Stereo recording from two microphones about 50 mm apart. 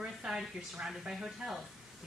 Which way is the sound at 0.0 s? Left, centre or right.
Centre.